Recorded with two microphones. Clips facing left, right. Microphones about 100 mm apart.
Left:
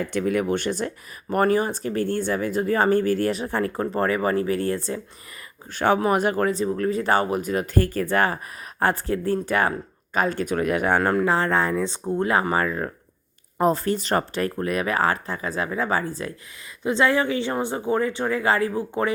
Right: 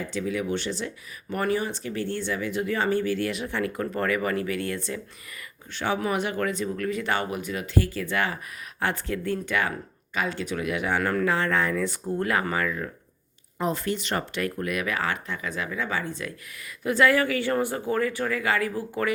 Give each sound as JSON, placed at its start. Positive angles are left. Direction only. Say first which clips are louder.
{"t": 0.0, "sound": "speech", "louder": "left 6 dB", "side_deg": 55}
{"t": 5.7, "sound": "speech", "louder": "left 6 dB", "side_deg": 50}
{"t": 11.0, "sound": "speech", "louder": "left 4 dB", "side_deg": 30}
{"t": 16.8, "sound": "speech", "louder": "left 1 dB", "side_deg": 25}